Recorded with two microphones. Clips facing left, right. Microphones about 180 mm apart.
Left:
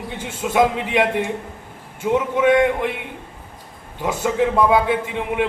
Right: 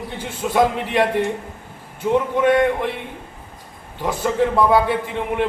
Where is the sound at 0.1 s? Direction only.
15° left (ahead or behind).